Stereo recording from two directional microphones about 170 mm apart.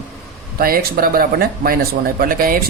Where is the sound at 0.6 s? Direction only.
60° right (ahead or behind).